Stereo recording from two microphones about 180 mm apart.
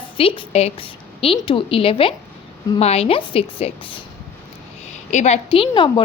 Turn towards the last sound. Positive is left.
turn(degrees=25)  # may be behind; listen again after turning